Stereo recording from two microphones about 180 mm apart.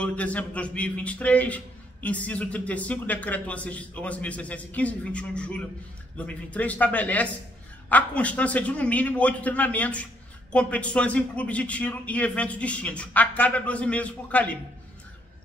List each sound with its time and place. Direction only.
0.0 s a man's voice: 10° left (ahead or behind)